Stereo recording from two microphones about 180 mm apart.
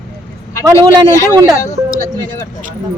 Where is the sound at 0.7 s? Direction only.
15° left (ahead or behind).